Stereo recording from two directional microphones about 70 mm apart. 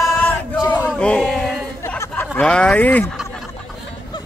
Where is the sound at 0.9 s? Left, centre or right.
Centre.